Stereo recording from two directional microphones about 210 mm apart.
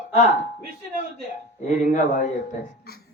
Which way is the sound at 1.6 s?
35° left (ahead or behind).